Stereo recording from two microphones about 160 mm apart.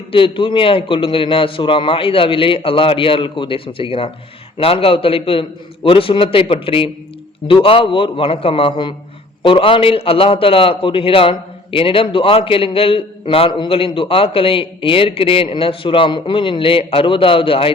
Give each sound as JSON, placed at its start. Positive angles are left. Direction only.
{"t": 0.1, "sound": "a man's voice", "side_deg": 35}